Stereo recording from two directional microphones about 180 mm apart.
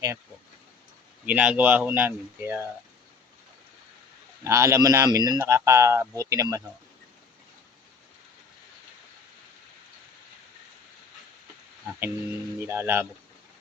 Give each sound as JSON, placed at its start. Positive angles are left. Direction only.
{"t": 1.2, "sound": "a man's voice", "side_deg": -5}
{"t": 4.4, "sound": "a man's voice", "side_deg": -15}
{"t": 11.9, "sound": "a man's voice", "side_deg": -10}